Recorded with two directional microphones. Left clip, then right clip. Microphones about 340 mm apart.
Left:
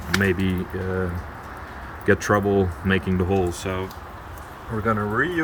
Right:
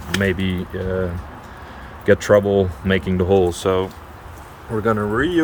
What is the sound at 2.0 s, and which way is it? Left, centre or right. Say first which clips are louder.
Speech: right 6 dB; centre.